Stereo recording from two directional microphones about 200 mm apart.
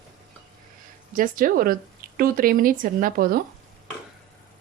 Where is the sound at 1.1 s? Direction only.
45° right (ahead or behind).